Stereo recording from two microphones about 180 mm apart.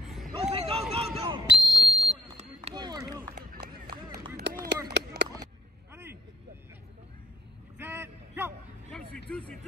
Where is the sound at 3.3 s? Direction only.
65° right (ahead or behind).